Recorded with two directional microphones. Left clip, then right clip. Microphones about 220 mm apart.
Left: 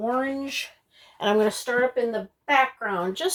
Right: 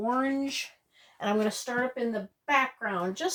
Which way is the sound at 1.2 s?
25° left (ahead or behind).